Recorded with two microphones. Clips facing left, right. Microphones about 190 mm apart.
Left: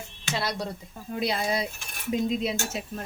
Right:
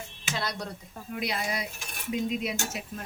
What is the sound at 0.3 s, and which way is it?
Speech, 25° left (ahead or behind).